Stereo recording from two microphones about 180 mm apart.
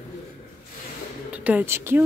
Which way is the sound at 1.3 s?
10° right (ahead or behind).